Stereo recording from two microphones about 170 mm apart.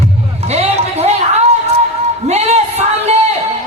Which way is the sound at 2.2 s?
40° right (ahead or behind).